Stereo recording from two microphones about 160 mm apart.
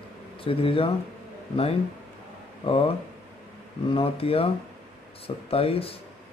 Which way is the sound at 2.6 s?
35° left (ahead or behind).